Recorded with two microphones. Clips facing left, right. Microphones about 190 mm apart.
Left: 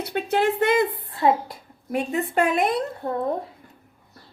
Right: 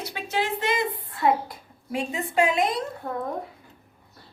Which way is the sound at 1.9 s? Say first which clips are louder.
Left 4 dB; 60° left (ahead or behind).